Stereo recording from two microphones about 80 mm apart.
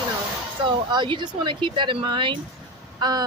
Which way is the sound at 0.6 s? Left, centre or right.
Right.